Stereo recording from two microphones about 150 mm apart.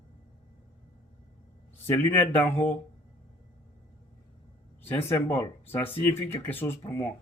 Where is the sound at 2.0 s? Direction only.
15° left (ahead or behind).